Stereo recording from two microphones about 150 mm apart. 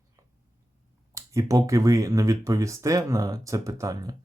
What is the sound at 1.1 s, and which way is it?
Speech, 20° right (ahead or behind).